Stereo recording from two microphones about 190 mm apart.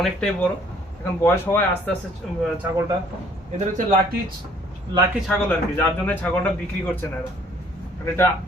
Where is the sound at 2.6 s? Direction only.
10° right (ahead or behind).